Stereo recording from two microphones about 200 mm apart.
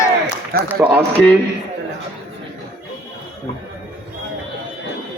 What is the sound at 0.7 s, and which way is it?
Speech, 10° right (ahead or behind).